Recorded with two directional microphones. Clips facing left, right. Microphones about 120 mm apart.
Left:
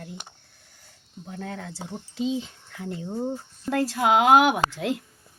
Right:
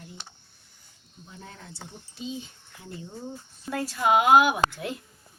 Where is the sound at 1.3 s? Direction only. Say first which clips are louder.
Left 10 dB; 70° left (ahead or behind).